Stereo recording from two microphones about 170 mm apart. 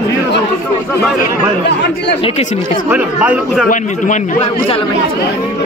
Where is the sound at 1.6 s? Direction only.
85° left.